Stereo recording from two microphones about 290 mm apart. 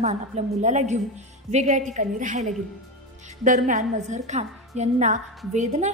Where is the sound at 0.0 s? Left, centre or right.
Right.